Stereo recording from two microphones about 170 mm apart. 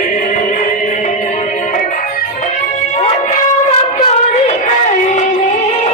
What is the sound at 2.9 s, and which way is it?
Music, 40° left (ahead or behind).